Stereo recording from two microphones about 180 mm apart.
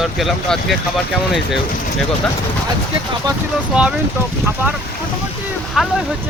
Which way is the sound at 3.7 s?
5° right (ahead or behind).